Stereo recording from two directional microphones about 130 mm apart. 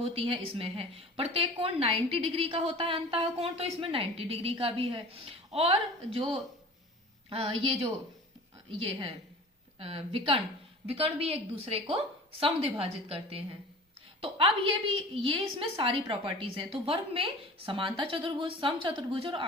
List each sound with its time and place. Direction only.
0.0 s a woman's voice: 45° right (ahead or behind)